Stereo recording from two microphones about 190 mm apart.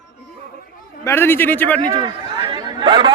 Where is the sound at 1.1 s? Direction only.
10° left (ahead or behind).